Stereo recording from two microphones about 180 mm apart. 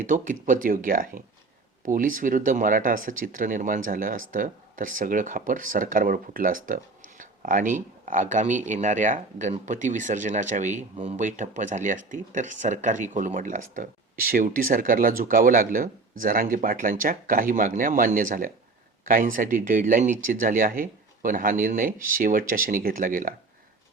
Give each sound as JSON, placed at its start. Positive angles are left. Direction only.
{"t": 0.0, "sound": "speech", "side_deg": -45}